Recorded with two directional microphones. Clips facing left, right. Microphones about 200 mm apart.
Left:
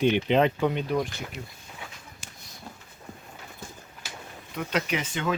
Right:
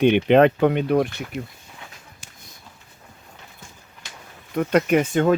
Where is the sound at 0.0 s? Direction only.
60° right (ahead or behind).